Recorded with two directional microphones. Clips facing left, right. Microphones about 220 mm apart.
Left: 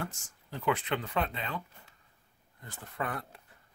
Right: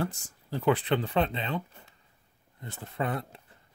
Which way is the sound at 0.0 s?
35° right (ahead or behind).